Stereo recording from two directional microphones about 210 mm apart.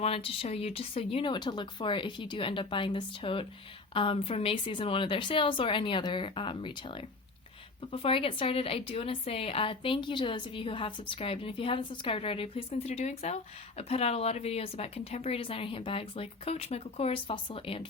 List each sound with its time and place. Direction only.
0.0 s speech: 25° left (ahead or behind)